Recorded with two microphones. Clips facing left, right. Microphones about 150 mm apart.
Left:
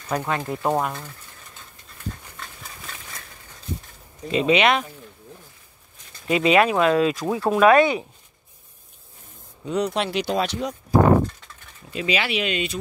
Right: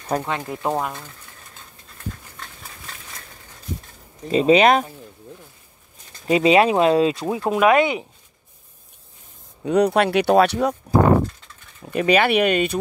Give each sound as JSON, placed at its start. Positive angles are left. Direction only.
{"t": 0.1, "sound": "speech", "side_deg": -35}
{"t": 0.5, "sound": "speech", "side_deg": 0}
{"t": 4.3, "sound": "speech", "side_deg": -35}
{"t": 6.2, "sound": "speech", "side_deg": -30}
{"t": 7.2, "sound": "speech", "side_deg": -15}
{"t": 9.7, "sound": "speech", "side_deg": -60}
{"t": 11.9, "sound": "speech", "side_deg": -55}